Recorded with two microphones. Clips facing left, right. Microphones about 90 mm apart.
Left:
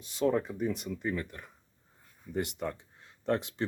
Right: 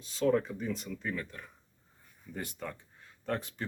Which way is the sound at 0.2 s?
15° left (ahead or behind).